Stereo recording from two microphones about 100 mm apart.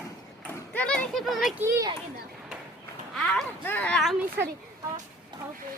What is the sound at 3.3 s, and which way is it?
Speech, 15° left (ahead or behind).